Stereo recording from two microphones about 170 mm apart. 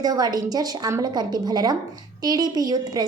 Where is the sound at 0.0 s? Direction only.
25° right (ahead or behind).